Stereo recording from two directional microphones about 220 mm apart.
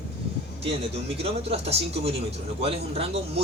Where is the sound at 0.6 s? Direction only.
25° right (ahead or behind).